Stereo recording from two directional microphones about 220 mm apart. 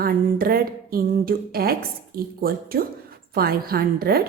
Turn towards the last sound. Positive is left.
turn(degrees=-45)  # may be behind; listen again after turning